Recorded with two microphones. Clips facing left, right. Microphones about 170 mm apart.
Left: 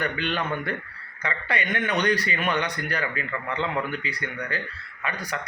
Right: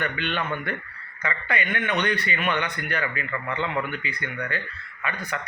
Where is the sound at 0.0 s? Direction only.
40° left (ahead or behind).